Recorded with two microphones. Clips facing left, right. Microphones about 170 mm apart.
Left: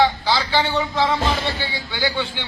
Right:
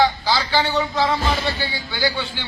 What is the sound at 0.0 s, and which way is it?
A man's voice, 5° right (ahead or behind).